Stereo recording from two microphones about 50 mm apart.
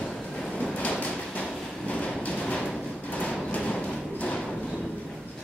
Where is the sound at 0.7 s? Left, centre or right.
Left.